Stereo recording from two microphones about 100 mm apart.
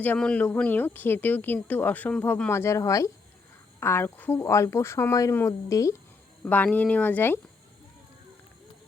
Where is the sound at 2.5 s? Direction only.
30° left (ahead or behind).